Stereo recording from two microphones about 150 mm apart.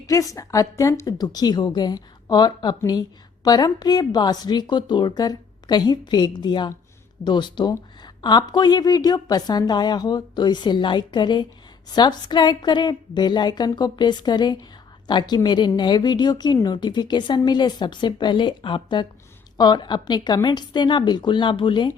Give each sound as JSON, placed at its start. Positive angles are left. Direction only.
{"t": 0.1, "sound": "a woman's voice", "side_deg": 20}